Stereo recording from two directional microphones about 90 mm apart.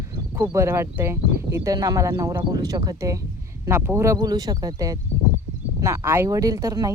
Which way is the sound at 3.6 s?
30° right (ahead or behind).